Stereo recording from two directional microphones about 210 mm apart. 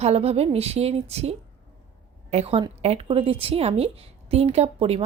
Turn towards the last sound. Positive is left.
turn(degrees=-30)  # may be behind; listen again after turning